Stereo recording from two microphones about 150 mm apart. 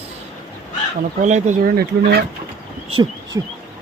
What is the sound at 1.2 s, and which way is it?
Speech, 55° right (ahead or behind).